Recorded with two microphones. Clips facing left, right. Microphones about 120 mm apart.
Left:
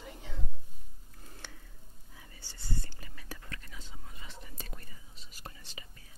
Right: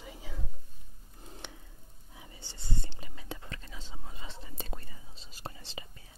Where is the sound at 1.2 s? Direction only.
20° right (ahead or behind).